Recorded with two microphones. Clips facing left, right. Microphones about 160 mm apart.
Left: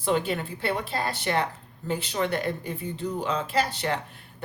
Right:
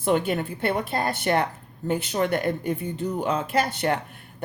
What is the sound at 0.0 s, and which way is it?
Speech, 50° right (ahead or behind).